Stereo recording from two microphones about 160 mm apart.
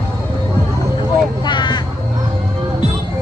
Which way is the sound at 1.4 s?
30° left (ahead or behind).